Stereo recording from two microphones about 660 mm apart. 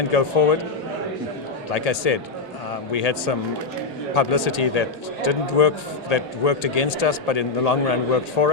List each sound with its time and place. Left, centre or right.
0.1 s speech: left
1.7 s a man's voice: left